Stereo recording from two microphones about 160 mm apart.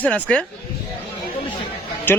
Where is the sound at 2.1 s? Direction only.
15° left (ahead or behind).